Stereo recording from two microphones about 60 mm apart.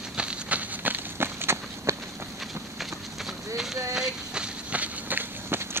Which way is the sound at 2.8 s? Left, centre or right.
Centre.